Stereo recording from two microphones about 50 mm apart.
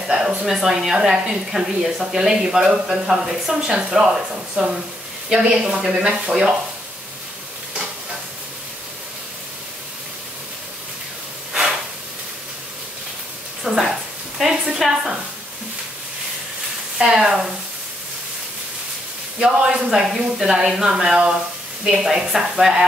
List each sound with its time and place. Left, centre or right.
0.4 s speech: centre
13.7 s a sound: centre
17.0 s speech: centre
19.4 s speech: centre